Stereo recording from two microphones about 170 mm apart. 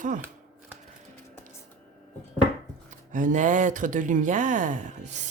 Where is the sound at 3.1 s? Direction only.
50° right (ahead or behind).